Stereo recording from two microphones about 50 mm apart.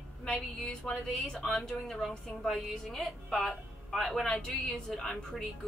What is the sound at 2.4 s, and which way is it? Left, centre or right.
A woman's voice, centre.